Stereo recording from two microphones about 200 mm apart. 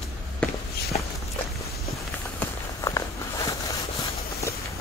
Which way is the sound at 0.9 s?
35° left (ahead or behind).